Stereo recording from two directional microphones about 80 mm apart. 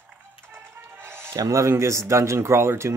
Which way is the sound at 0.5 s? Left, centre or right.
Right.